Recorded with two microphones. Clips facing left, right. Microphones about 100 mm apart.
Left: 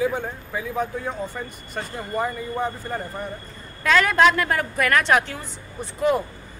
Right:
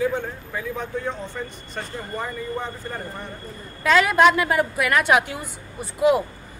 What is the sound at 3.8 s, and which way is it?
A woman's voice, 5° right (ahead or behind).